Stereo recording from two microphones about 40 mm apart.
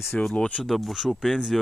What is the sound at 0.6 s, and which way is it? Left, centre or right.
Speech, centre.